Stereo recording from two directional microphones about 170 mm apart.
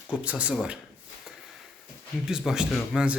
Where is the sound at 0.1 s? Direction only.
10° right (ahead or behind).